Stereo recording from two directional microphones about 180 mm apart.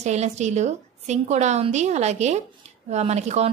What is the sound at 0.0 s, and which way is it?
A woman's voice, 40° right (ahead or behind).